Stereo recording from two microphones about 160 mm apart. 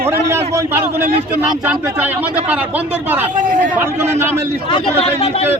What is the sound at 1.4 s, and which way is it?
A man's voice, 10° right (ahead or behind).